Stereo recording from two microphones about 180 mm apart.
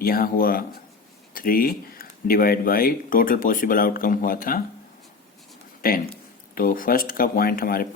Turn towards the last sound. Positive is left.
turn(degrees=55)  # may be behind; listen again after turning